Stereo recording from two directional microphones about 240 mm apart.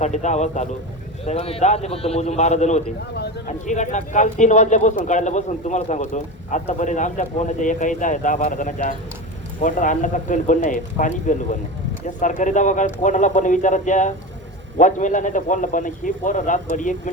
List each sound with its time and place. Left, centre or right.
0.0 s a man's voice: left